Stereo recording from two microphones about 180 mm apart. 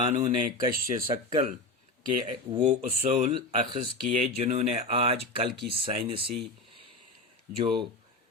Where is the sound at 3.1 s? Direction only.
35° right (ahead or behind).